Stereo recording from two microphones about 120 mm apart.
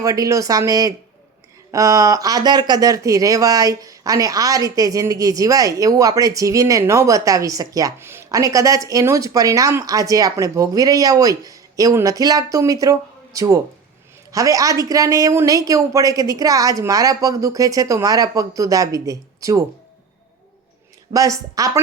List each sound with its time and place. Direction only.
0.0 s speech: 30° right (ahead or behind)
21.1 s speech: 30° right (ahead or behind)